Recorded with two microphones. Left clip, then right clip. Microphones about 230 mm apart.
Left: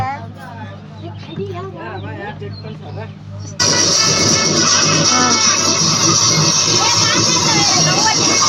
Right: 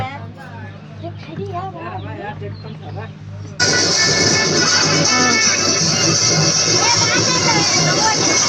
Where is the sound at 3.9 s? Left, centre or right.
Left.